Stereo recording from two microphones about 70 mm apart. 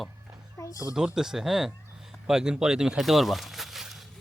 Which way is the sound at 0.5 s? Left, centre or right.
Left.